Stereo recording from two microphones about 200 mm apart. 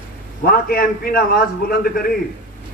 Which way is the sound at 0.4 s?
50° left (ahead or behind).